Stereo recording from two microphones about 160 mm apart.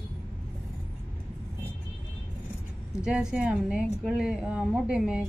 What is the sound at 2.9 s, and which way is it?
A woman's voice, 5° right (ahead or behind).